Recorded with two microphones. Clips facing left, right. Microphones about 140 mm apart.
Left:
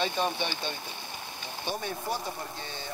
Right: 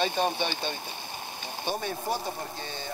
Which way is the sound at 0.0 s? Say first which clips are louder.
Right 2 dB; 45° right (ahead or behind).